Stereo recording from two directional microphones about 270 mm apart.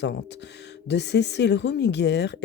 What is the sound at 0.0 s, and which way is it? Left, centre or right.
Speech, left.